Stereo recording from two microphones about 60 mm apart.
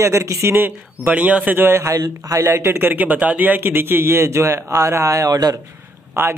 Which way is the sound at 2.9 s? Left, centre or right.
Right.